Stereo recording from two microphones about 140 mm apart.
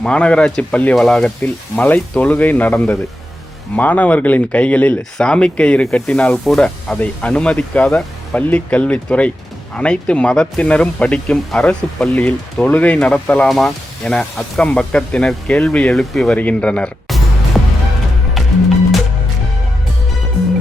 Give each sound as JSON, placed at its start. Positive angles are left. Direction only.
{"t": 0.0, "sound": "speech", "side_deg": 5}
{"t": 17.5, "sound": "music", "side_deg": 0}